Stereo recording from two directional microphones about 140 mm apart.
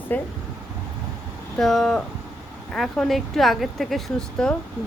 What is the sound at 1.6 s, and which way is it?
Speech, centre (ahead or behind).